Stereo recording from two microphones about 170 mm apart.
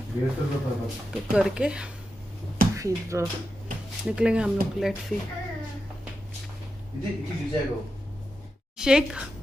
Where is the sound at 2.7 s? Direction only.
20° right (ahead or behind).